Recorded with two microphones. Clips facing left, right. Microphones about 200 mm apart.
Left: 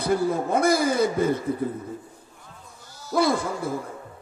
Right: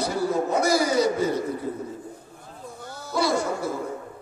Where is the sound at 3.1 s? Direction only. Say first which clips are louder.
Left 1 dB; 55° left (ahead or behind).